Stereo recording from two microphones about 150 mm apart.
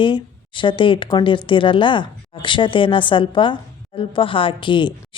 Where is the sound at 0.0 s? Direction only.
35° left (ahead or behind).